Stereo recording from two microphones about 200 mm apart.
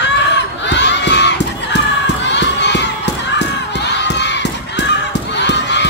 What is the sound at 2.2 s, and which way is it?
Crowd, 60° left (ahead or behind).